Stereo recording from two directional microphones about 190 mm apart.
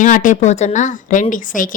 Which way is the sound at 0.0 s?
40° left (ahead or behind).